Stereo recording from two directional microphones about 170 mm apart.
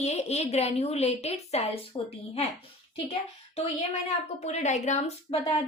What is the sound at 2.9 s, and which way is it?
Speech, 35° left (ahead or behind).